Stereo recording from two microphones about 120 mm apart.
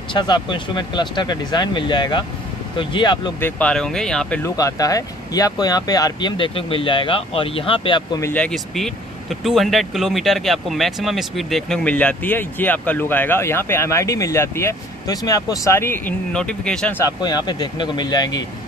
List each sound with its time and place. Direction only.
0.1 s speech: 40° left (ahead or behind)
3.3 s speech: 15° left (ahead or behind)
4.4 s speech: 30° left (ahead or behind)
6.3 s speech: 45° left (ahead or behind)
8.2 s speech: 15° left (ahead or behind)
8.5 s speech: 5° left (ahead or behind); by 16.2 s 20° left (ahead or behind)
16.3 s speech: 5° left (ahead or behind)
17.0 s speech: 35° left (ahead or behind)